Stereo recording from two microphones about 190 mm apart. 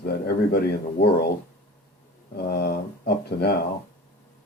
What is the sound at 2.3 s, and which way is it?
Speech, 55° left (ahead or behind).